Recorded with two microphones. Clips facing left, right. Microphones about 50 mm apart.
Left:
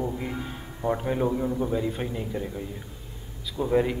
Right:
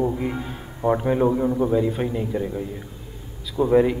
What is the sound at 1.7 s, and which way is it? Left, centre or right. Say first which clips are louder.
Speech: right 6 dB; centre.